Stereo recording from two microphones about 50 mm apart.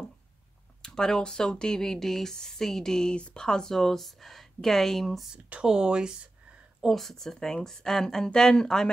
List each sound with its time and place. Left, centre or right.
0.8 s speech: centre
5.6 s speech: centre
6.8 s speech: centre